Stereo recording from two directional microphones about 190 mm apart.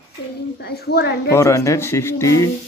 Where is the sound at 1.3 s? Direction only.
15° left (ahead or behind).